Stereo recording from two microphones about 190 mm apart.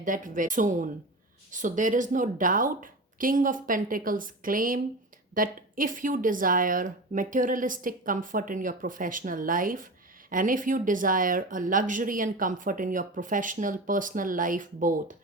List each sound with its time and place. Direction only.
0.0 s speech: 45° right (ahead or behind)